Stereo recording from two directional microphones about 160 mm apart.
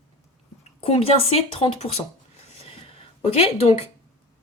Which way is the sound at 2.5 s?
40° left (ahead or behind).